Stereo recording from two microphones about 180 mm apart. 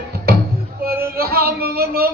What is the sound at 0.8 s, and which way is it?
Music, 55° right (ahead or behind).